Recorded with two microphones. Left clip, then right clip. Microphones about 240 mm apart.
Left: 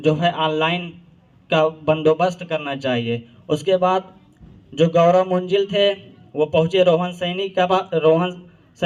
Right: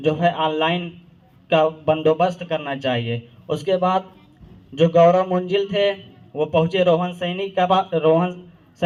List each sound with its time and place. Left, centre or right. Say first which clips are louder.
0.0 s a man's voice: left 1 dB; left